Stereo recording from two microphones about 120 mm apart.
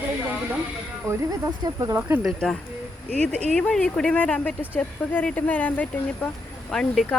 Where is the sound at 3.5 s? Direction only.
5° left (ahead or behind).